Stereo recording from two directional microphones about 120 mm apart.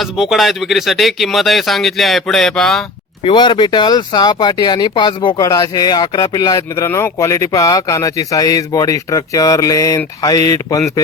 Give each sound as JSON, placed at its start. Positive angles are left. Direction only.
{"t": 0.0, "sound": "speech", "side_deg": 0}
{"t": 3.2, "sound": "speech", "side_deg": 40}